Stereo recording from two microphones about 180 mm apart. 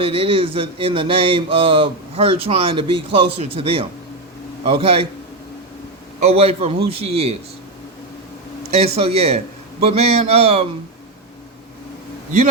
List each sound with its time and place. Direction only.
0.0 s speech: 30° right (ahead or behind)
6.2 s speech: 35° right (ahead or behind)
8.6 s a sound: 35° right (ahead or behind)
9.0 s speech: 35° right (ahead or behind)